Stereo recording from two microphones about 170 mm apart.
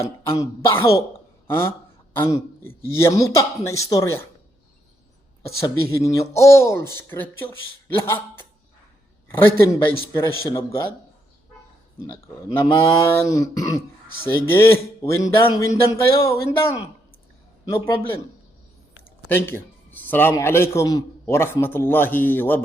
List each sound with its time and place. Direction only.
0.0 s a man's voice: 15° left (ahead or behind)
5.9 s a man's voice: 20° left (ahead or behind)
12.5 s a man's voice: 15° left (ahead or behind)
19.3 s a man's voice: 15° left (ahead or behind)